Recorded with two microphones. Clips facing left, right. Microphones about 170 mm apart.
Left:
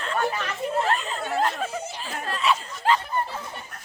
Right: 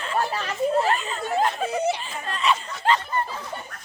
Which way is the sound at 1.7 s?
70° right (ahead or behind).